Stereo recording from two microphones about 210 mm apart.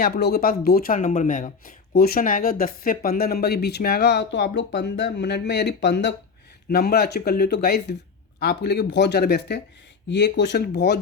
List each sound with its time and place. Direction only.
0.0 s speech: 50° left (ahead or behind)